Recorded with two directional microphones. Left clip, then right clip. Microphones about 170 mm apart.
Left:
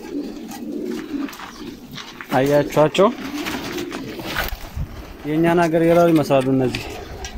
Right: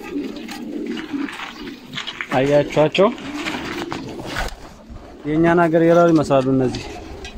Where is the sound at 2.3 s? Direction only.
Centre (ahead or behind).